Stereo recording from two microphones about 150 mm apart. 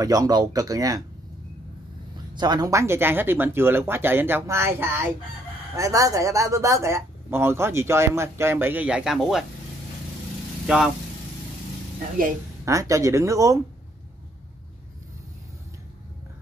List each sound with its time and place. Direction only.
0.0 s speech: 25° right (ahead or behind)
2.3 s speech: 30° right (ahead or behind); by 9.4 s centre (ahead or behind)
12.6 s speech: 20° right (ahead or behind)